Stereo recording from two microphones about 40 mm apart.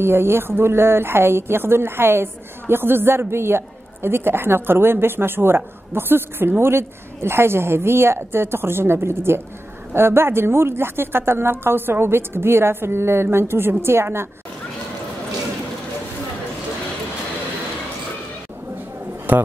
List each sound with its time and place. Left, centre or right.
0.0 s a man's voice: right
6.6 s speech: right
19.3 s a man's voice: right